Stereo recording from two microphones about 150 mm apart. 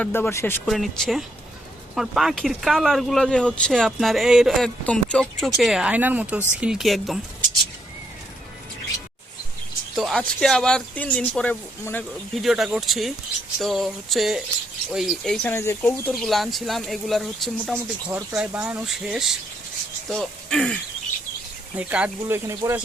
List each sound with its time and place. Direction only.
0.0 s speech: 15° left (ahead or behind)
0.7 s speech: centre (ahead or behind)
9.9 s speech: centre (ahead or behind)
12.3 s speech: centre (ahead or behind)
21.8 s speech: 10° right (ahead or behind)